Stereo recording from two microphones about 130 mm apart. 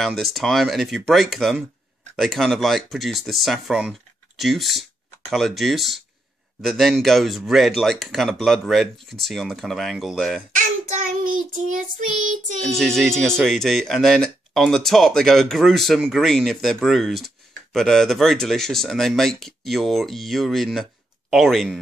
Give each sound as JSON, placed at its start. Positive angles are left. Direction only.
{"t": 0.0, "sound": "speech", "side_deg": 0}
{"t": 10.6, "sound": "child singing", "side_deg": -90}
{"t": 12.6, "sound": "speech", "side_deg": 5}